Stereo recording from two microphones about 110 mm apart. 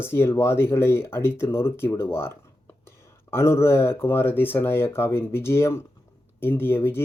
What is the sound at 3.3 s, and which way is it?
Speech, 25° left (ahead or behind).